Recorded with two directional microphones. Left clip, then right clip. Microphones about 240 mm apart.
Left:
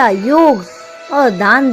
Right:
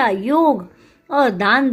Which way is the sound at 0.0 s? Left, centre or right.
Centre.